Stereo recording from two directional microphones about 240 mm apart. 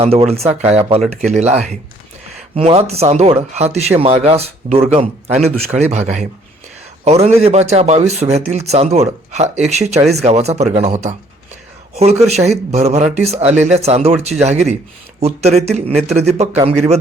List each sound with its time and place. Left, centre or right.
0.0 s speech: right
2.6 s speech: right
12.3 s speech: right